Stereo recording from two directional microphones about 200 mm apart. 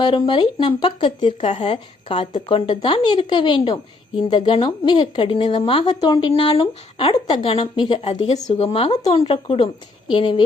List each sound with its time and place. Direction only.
0.0 s speech: 25° left (ahead or behind)